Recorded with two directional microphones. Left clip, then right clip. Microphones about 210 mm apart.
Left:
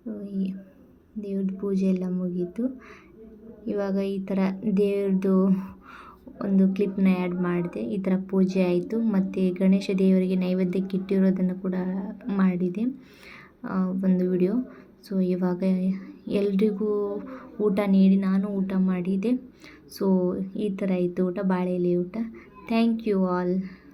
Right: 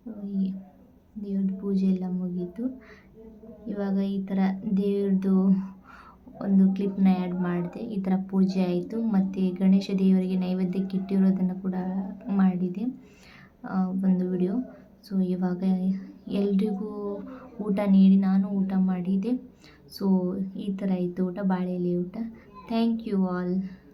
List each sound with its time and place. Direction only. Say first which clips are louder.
1.2 s a woman's voice: left 2 dB; 15° left (ahead or behind)
3.7 s a woman's voice: left 4 dB; 20° left (ahead or behind)